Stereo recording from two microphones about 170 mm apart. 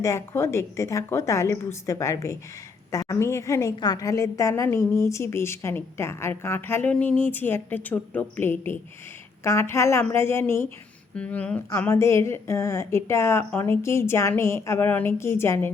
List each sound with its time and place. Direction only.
0.0 s a woman's voice: 15° left (ahead or behind)